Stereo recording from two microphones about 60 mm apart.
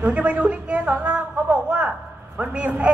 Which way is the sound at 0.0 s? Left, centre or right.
Right.